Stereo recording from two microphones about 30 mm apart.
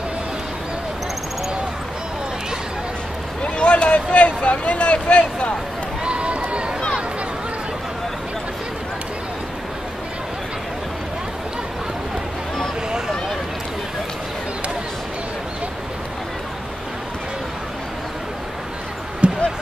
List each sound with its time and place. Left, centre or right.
3.4 s a sound: left
6.0 s run: right
19.2 s basketball bounce: right